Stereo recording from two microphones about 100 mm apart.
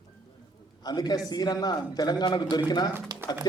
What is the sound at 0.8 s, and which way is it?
A man's voice, 45° left (ahead or behind).